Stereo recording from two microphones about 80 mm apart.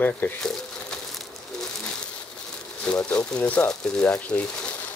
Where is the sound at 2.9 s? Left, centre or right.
Centre.